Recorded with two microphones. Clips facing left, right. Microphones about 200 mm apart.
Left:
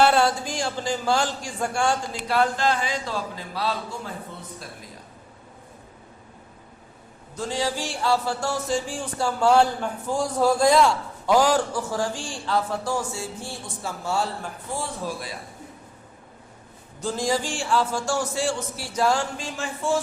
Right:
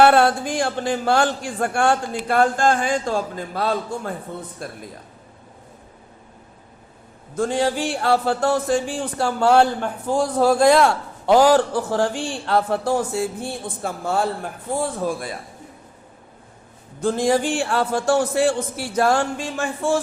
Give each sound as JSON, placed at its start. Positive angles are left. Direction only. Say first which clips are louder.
{"t": 0.0, "sound": "a man's voice", "louder": "right 5 dB", "side_deg": -55}
{"t": 7.3, "sound": "a man's voice", "louder": "right 6 dB", "side_deg": -55}
{"t": 17.0, "sound": "a man's voice", "louder": "right 6 dB", "side_deg": -55}